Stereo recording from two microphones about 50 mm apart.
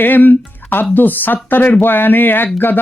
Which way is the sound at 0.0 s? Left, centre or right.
Left.